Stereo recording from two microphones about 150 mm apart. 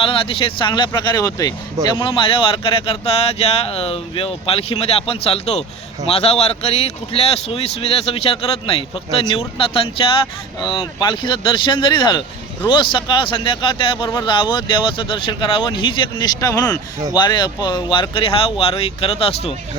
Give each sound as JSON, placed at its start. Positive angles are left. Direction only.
{"t": 0.0, "sound": "speech", "side_deg": 40}